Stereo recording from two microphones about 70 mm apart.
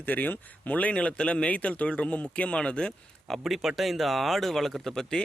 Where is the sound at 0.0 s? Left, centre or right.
Left.